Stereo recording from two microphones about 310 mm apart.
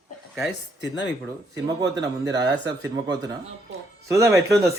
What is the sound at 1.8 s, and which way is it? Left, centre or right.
Speech, centre.